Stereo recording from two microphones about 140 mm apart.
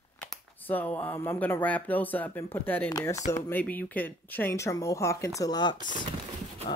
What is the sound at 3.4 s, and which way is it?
Speech, 10° left (ahead or behind).